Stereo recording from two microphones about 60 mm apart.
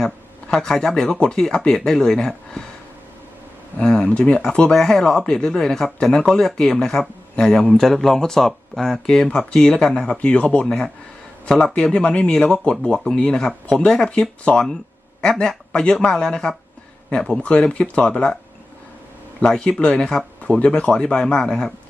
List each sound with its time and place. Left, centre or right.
0.5 s speech: centre
3.8 s speech: centre
10.7 s speech: centre
11.4 s speech: centre
19.5 s speech: centre